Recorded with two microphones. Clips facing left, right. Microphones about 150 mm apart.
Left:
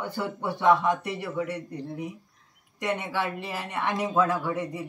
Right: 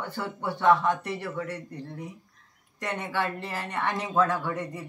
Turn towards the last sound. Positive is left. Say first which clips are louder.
# left 2 dB
turn(degrees=10)  # may be behind; listen again after turning